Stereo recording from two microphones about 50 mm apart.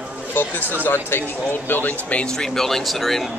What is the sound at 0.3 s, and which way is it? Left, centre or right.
Speech, left.